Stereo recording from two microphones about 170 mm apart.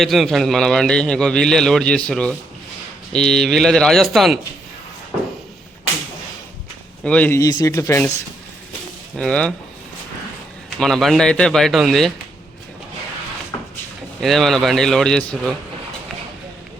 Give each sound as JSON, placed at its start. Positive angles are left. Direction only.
{"t": 0.0, "sound": "a man's voice", "side_deg": 0}
{"t": 7.0, "sound": "speech", "side_deg": 5}
{"t": 9.1, "sound": "a man's voice", "side_deg": 5}
{"t": 10.8, "sound": "a man's voice", "side_deg": 0}
{"t": 13.5, "sound": "a sound", "side_deg": 20}
{"t": 14.2, "sound": "a man's voice", "side_deg": 0}